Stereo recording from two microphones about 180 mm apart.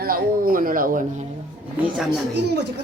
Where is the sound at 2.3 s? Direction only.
70° right (ahead or behind).